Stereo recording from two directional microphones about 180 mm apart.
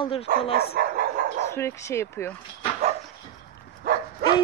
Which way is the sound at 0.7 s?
55° right (ahead or behind).